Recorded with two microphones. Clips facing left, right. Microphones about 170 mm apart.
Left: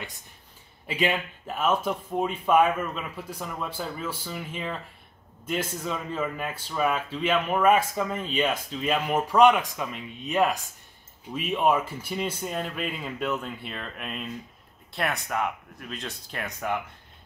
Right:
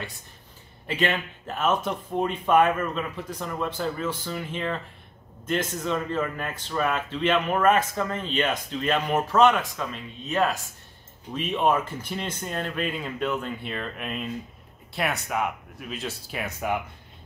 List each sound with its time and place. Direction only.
0.8 s speech: 10° left (ahead or behind); by 16.7 s 5° right (ahead or behind)